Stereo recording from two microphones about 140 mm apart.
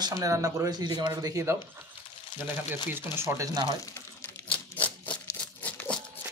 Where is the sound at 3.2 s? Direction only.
20° right (ahead or behind).